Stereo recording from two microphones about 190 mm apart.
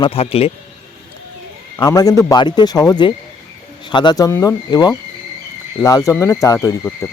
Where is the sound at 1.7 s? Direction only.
20° left (ahead or behind).